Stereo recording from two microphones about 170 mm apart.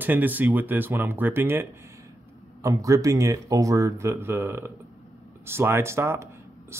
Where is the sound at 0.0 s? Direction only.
10° right (ahead or behind).